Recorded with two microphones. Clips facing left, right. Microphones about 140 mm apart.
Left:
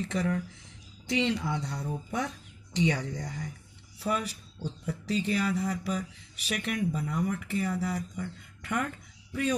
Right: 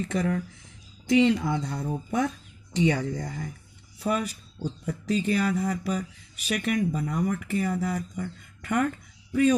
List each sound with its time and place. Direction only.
0.1 s speech: 50° right (ahead or behind)